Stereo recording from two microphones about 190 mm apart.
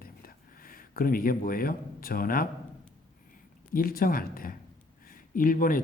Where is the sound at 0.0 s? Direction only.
50° left (ahead or behind).